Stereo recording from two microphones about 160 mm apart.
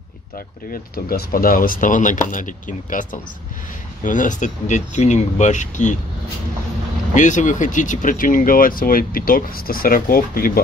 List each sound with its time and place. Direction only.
0.7 s speech: 65° left (ahead or behind); by 5.9 s 50° left (ahead or behind)
7.2 s speech: 50° left (ahead or behind)